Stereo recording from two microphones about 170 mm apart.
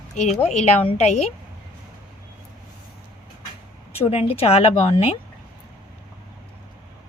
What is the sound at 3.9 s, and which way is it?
A woman's voice, 35° left (ahead or behind).